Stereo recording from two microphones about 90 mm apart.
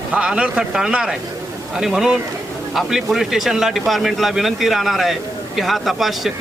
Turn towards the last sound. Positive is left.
turn(degrees=0)  # may be behind; listen again after turning